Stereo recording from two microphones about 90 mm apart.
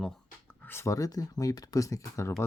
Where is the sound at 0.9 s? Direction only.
40° left (ahead or behind).